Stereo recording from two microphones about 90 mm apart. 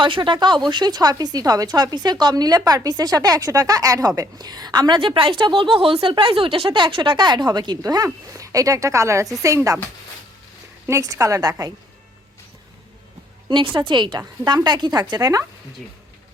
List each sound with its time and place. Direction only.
0.0 s a woman's voice: 65° right (ahead or behind); by 9.7 s 35° right (ahead or behind)
10.8 s a woman's voice: 40° right (ahead or behind)
13.7 s speech: 60° right (ahead or behind); by 15.4 s 40° right (ahead or behind)